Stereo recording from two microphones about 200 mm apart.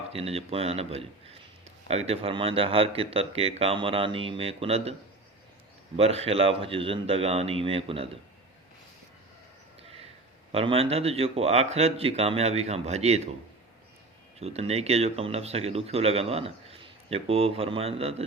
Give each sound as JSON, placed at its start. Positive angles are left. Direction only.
{"t": 0.1, "sound": "speech", "side_deg": -30}
{"t": 6.0, "sound": "speech", "side_deg": -30}
{"t": 10.5, "sound": "speech", "side_deg": -30}
{"t": 14.3, "sound": "speech", "side_deg": -30}